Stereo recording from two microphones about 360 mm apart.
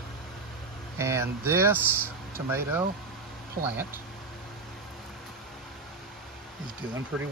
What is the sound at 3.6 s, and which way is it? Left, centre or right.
Speech, right.